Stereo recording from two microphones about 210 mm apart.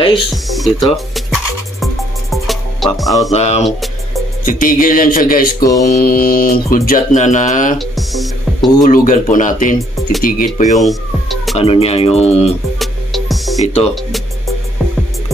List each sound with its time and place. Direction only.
0.3 s music: centre (ahead or behind)
3.3 s speech: 30° left (ahead or behind)
3.6 s music: centre (ahead or behind)
4.5 s speech: 40° left (ahead or behind)
5.6 s mantra: 15° left (ahead or behind)
5.9 s speech: 45° left (ahead or behind)
7.8 s music: centre (ahead or behind)
8.8 s speech: 40° left (ahead or behind)
10.8 s music: centre (ahead or behind)
11.5 s speech: 25° left (ahead or behind)
12.7 s music: centre (ahead or behind)